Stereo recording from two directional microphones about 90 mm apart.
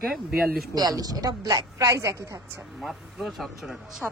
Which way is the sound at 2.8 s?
5° right (ahead or behind).